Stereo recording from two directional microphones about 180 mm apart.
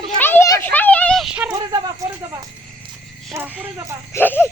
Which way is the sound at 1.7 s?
20° right (ahead or behind).